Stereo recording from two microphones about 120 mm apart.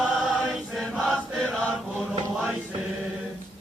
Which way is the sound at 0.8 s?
Centre (ahead or behind).